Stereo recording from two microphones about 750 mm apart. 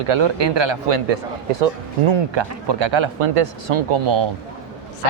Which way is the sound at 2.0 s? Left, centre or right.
Right.